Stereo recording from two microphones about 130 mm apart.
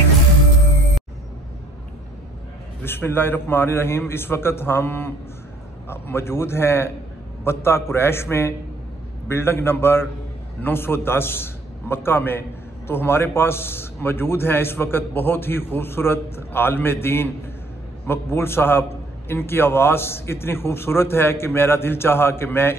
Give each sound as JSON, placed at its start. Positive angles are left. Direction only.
{"t": 2.8, "sound": "a man's voice", "side_deg": 15}